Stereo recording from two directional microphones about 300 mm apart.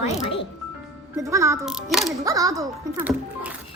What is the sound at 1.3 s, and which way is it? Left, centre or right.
Speech, centre.